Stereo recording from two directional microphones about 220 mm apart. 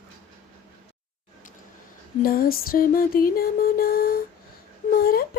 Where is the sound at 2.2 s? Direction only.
40° left (ahead or behind).